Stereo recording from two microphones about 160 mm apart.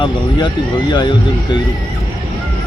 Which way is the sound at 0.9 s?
30° left (ahead or behind).